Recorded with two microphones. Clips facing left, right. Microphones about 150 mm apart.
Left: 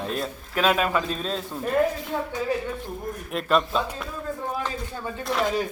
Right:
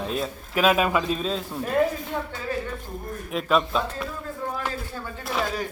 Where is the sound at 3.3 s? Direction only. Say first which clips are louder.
Even; centre (ahead or behind).